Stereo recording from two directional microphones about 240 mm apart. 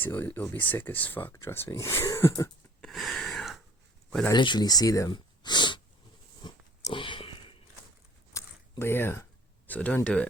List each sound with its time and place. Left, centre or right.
0.0 s speech: centre
4.3 s speech: centre
6.4 s biting: centre
8.3 s a sound: centre
9.6 s speech: centre